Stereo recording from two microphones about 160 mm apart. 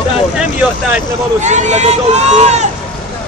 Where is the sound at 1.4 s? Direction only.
45° right (ahead or behind).